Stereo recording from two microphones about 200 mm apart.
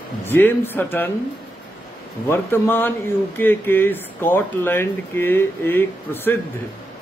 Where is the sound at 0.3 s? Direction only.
10° left (ahead or behind).